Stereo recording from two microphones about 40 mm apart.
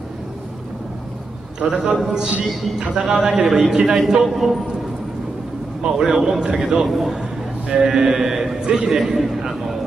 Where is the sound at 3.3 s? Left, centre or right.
Centre.